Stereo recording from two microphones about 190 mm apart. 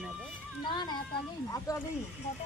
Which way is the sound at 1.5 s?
15° left (ahead or behind).